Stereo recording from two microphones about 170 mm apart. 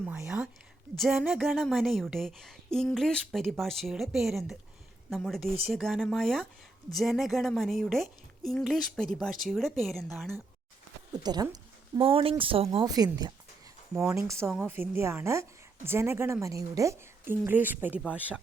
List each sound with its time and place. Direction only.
0.0 s speech: 10° right (ahead or behind)
11.2 s speech: 25° right (ahead or behind)
12.8 s speech: 20° right (ahead or behind)